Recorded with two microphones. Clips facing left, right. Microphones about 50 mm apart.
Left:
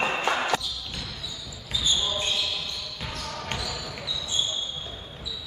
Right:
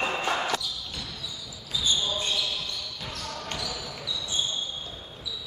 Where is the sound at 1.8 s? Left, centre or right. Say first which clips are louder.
Left 1 dB; left.